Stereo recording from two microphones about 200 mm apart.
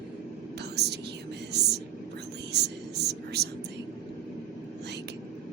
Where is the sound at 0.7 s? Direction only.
55° right (ahead or behind).